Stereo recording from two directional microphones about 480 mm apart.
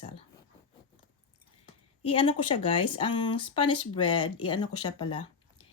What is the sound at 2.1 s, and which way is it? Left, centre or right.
Speech, centre.